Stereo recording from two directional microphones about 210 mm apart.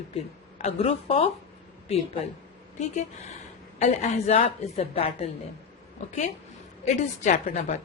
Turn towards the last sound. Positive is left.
turn(degrees=35)  # may be behind; listen again after turning